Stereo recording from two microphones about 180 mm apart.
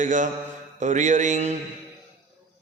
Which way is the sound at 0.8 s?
40° right (ahead or behind).